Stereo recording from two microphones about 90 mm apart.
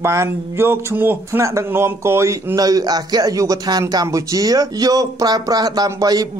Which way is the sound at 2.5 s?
45° right (ahead or behind).